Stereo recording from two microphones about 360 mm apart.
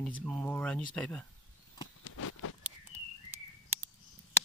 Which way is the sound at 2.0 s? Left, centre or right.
Left.